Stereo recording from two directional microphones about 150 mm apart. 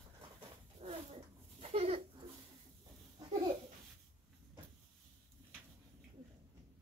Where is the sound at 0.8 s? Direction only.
35° right (ahead or behind).